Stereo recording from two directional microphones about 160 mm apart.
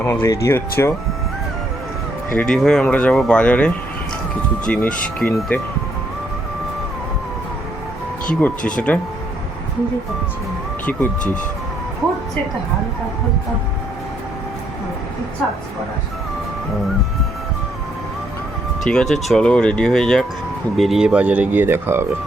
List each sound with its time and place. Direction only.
0.0 s speech: 15° left (ahead or behind)
2.3 s speech: 5° left (ahead or behind)
8.4 s speech: 10° left (ahead or behind)
18.8 s speech: 5° left (ahead or behind); by 22.0 s 15° right (ahead or behind)